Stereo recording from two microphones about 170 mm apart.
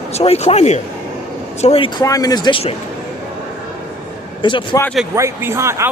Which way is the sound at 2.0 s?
20° left (ahead or behind).